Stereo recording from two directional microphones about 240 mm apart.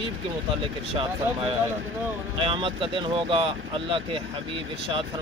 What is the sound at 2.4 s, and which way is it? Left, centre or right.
Speech, right.